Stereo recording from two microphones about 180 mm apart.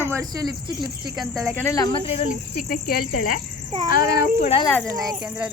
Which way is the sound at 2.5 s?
55° left (ahead or behind).